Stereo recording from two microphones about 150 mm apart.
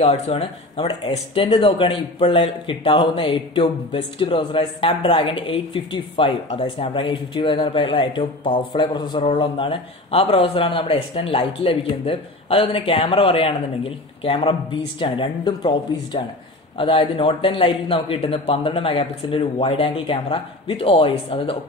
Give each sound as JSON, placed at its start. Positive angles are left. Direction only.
{"t": 0.0, "sound": "speech", "side_deg": 45}
{"t": 0.7, "sound": "speech", "side_deg": 25}